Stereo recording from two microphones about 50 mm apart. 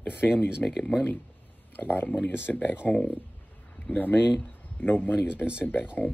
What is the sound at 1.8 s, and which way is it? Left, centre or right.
Speech, left.